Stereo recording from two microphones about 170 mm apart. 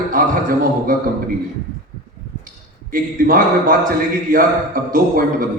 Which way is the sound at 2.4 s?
55° right (ahead or behind).